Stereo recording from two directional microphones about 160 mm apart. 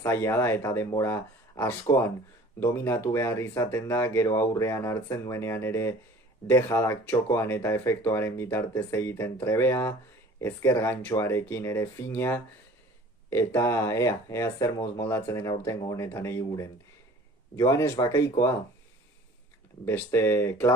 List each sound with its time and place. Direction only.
0.0 s speech: 15° left (ahead or behind)
19.8 s speech: 15° left (ahead or behind)